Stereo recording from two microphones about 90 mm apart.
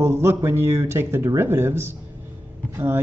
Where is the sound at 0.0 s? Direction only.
30° right (ahead or behind).